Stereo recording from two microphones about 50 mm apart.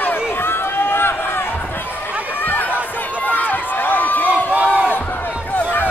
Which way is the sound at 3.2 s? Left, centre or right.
Left.